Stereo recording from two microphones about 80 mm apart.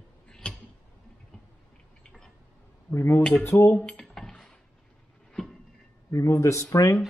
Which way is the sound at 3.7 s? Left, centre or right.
Centre.